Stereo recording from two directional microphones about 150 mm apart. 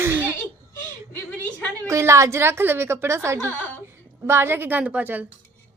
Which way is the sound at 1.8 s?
20° right (ahead or behind).